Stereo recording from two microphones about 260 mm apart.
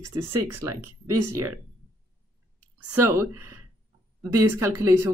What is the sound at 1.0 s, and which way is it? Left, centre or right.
Speech, centre.